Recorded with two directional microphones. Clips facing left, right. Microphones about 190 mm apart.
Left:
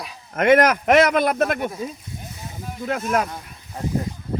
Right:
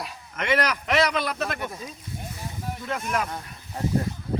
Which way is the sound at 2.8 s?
50° left (ahead or behind).